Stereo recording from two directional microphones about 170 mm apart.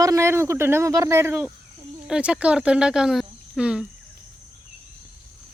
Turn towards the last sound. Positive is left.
turn(degrees=-5)  # may be behind; listen again after turning